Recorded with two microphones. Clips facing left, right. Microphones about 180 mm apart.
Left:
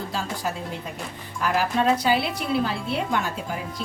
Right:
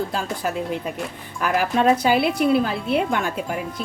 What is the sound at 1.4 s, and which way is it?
Speech, 55° right (ahead or behind).